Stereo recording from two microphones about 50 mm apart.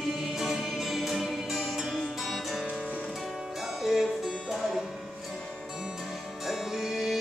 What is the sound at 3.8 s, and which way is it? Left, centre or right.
Music, centre.